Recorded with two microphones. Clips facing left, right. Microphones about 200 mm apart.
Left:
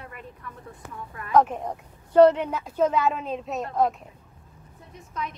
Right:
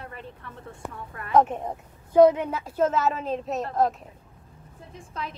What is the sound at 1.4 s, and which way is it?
A woman's voice, centre (ahead or behind).